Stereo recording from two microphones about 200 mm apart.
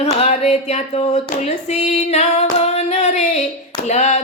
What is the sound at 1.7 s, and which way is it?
Female singing, 35° left (ahead or behind).